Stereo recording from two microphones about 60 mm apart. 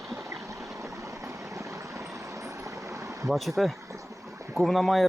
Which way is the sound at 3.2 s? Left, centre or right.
Centre.